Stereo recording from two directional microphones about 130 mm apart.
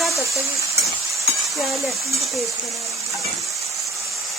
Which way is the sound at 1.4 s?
Centre (ahead or behind).